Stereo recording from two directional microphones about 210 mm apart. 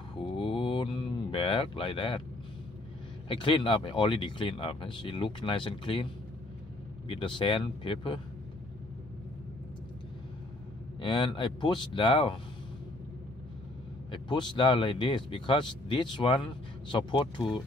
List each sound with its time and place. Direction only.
0.4 s a sound: 25° left (ahead or behind)
3.3 s speech: 25° left (ahead or behind)
11.0 s speech: 20° left (ahead or behind)
14.1 s speech: 20° left (ahead or behind)